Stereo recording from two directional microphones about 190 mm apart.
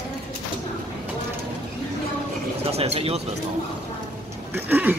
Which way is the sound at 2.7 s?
30° right (ahead or behind).